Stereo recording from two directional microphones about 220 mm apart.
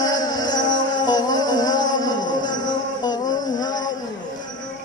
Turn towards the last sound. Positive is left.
turn(degrees=20)  # may be behind; listen again after turning